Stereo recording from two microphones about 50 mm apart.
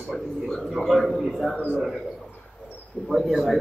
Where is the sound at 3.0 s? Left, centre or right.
Centre.